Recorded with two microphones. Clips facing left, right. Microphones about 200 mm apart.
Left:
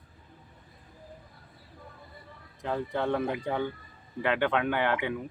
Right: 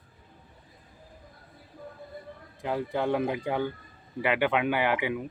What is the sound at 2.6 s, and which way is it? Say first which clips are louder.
Speech: right 1 dB; 10° right (ahead or behind).